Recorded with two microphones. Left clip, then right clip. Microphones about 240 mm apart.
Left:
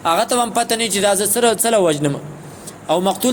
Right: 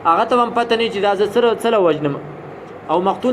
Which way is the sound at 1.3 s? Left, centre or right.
Left.